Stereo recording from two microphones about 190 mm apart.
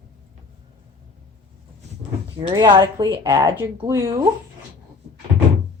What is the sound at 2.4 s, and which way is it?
A woman's voice, 25° right (ahead or behind).